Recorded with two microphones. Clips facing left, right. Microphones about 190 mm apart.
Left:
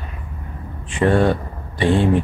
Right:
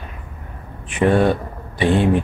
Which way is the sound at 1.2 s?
15° right (ahead or behind).